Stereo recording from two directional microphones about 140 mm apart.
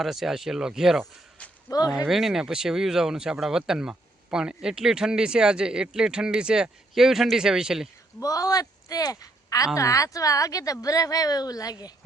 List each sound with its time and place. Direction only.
0.0 s speech: centre (ahead or behind)
1.4 s a sound: 10° left (ahead or behind)
2.0 s speech: centre (ahead or behind)
8.2 s a woman's voice: 25° left (ahead or behind)